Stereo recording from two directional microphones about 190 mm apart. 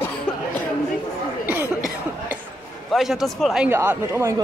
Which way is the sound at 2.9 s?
Centre (ahead or behind).